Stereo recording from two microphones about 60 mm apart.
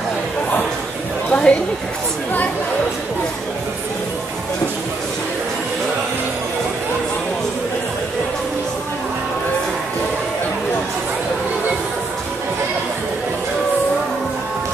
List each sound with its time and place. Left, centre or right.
1.3 s speech: left